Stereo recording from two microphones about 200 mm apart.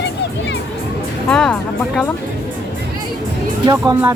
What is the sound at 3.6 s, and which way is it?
Speech, 20° right (ahead or behind).